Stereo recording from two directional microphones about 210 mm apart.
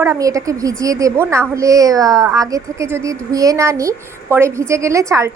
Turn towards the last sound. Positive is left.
turn(degrees=-15)  # may be behind; listen again after turning